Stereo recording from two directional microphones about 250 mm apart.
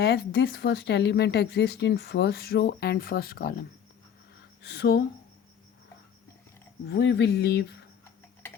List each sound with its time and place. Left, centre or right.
0.0 s speech: left
4.6 s speech: left
6.8 s speech: left